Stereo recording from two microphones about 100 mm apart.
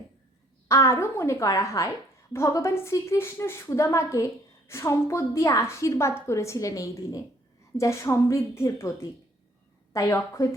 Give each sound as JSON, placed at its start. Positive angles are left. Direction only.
{"t": 0.7, "sound": "a woman's voice", "side_deg": 30}
{"t": 9.9, "sound": "a woman's voice", "side_deg": 35}